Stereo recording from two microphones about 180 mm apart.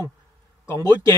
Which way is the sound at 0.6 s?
20° left (ahead or behind).